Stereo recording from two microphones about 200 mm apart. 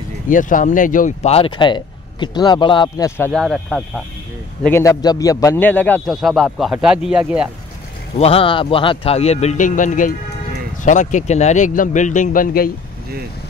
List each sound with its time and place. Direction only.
0.3 s speech: 40° left (ahead or behind); by 3.1 s 25° left (ahead or behind)
3.2 s a man's voice: 5° left (ahead or behind)
4.6 s a man's voice: 15° left (ahead or behind); by 7.4 s 5° right (ahead or behind)
8.2 s a man's voice: 30° left (ahead or behind); by 12.7 s 45° left (ahead or behind)